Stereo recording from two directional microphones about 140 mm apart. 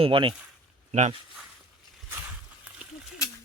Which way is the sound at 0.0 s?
40° right (ahead or behind).